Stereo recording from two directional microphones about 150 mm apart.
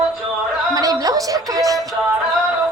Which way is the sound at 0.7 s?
25° right (ahead or behind).